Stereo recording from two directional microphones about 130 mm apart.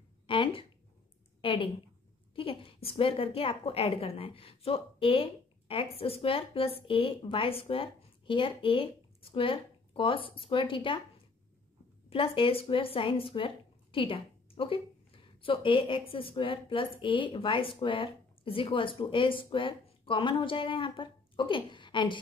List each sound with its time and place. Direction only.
0.3 s a woman's voice: 40° left (ahead or behind)
12.1 s a woman's voice: 45° left (ahead or behind)